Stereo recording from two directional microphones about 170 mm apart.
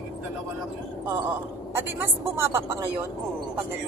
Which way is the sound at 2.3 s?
15° right (ahead or behind).